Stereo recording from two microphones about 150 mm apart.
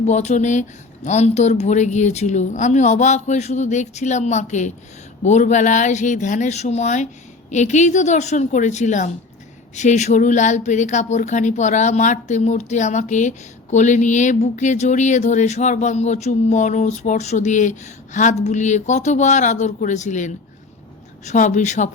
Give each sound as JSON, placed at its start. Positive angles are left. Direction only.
{"t": 0.0, "sound": "speech", "side_deg": 50}